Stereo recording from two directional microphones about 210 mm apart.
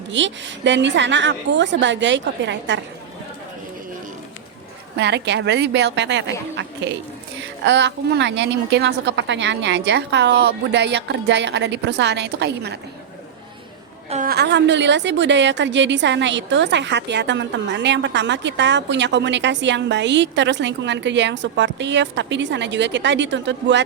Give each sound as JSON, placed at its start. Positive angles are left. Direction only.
{"t": 0.1, "sound": "a woman's voice", "side_deg": -60}
{"t": 4.9, "sound": "a woman's voice", "side_deg": -55}
{"t": 7.6, "sound": "a woman's voice", "side_deg": -55}
{"t": 14.1, "sound": "a woman's voice", "side_deg": -35}
{"t": 14.3, "sound": "a woman's voice", "side_deg": -55}